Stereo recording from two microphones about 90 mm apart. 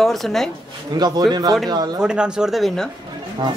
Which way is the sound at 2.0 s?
10° right (ahead or behind).